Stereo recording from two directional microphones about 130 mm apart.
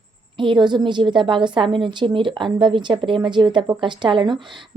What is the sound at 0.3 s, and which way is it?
A woman's voice, 40° right (ahead or behind).